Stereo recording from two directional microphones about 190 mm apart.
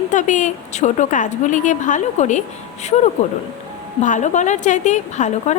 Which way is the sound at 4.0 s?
40° left (ahead or behind).